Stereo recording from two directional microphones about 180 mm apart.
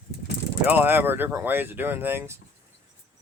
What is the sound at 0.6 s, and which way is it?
Speech, 10° right (ahead or behind).